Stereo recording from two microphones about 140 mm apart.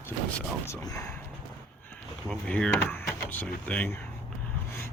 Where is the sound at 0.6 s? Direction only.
20° left (ahead or behind).